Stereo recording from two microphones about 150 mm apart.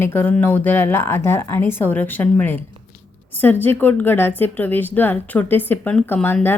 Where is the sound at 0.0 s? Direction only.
15° left (ahead or behind).